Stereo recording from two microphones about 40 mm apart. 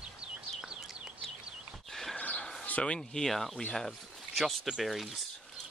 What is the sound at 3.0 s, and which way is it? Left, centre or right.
Speech, centre.